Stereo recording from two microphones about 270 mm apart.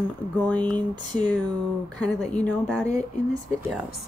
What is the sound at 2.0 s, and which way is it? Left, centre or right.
Speech, centre.